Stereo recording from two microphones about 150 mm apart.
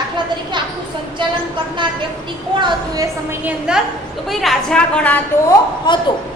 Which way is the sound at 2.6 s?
30° right (ahead or behind).